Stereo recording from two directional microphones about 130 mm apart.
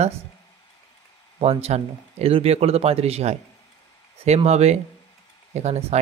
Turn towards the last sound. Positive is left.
turn(degrees=-55)  # may be behind; listen again after turning